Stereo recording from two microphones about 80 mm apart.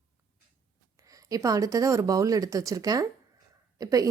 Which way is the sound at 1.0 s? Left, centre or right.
Right.